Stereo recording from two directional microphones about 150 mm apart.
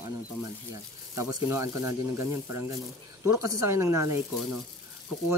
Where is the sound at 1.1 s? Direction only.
20° right (ahead or behind).